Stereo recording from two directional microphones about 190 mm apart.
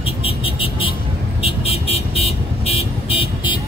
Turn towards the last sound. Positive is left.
turn(degrees=25)  # may be behind; listen again after turning